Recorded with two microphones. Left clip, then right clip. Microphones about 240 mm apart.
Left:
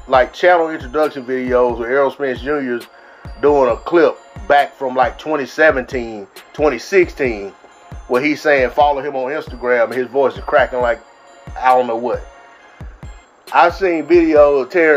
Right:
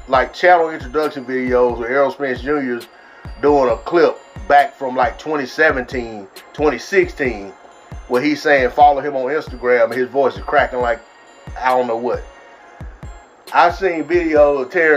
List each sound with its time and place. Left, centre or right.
0.1 s speech: centre
13.5 s a man's voice: centre